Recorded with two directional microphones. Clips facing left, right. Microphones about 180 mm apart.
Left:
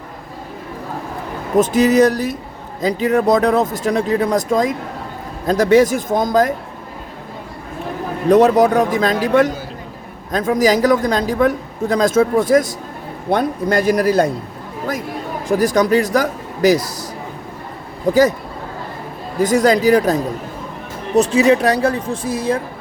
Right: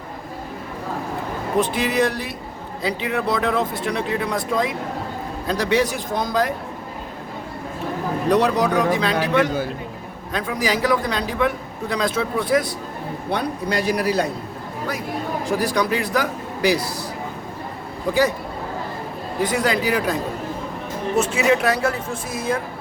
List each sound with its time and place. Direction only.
1.5 s a man's voice: 45° left (ahead or behind)
8.3 s a man's voice: 45° left (ahead or behind)
18.1 s speech: 40° left (ahead or behind)
19.4 s speech: 40° left (ahead or behind)
21.2 s speech: 35° left (ahead or behind)